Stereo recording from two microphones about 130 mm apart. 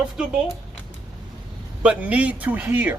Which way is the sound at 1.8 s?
10° right (ahead or behind).